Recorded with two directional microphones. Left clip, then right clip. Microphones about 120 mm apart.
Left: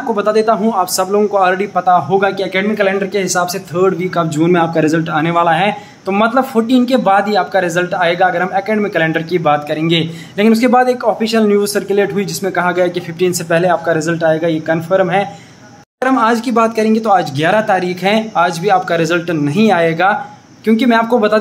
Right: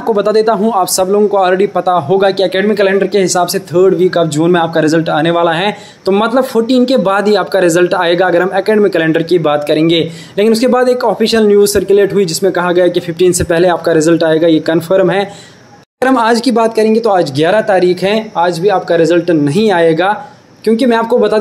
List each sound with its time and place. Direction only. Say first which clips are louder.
0.1 s a man's voice: right 3 dB; 35° right (ahead or behind)
7.2 s a man's voice: right 2 dB; 45° right (ahead or behind); by 13.3 s 20° right (ahead or behind)
13.5 s speech: right 3 dB; 35° right (ahead or behind)
16.5 s a man's voice: right 3 dB; 25° right (ahead or behind)
18.1 s a man's voice: right 1 dB; 10° right (ahead or behind)